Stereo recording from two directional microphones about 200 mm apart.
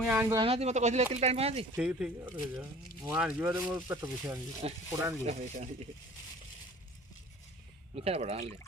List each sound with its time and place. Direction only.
0.1 s speech: 10° right (ahead or behind)
0.3 s speech: 30° right (ahead or behind)
1.7 s speech: 5° right (ahead or behind)
4.6 s speech: 30° right (ahead or behind)
7.9 s speech: 30° right (ahead or behind)